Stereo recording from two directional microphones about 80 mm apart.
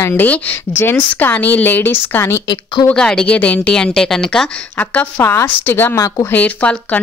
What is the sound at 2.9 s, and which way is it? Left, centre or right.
A woman's voice, centre.